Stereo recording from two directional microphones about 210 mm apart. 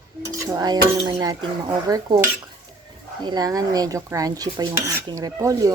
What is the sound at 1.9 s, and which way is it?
Dishes, 15° right (ahead or behind).